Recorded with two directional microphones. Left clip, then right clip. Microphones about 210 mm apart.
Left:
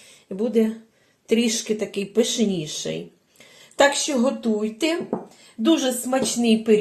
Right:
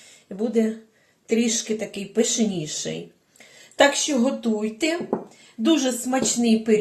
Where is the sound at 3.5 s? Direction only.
25° left (ahead or behind).